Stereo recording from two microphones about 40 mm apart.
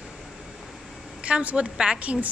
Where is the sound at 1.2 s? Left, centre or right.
Right.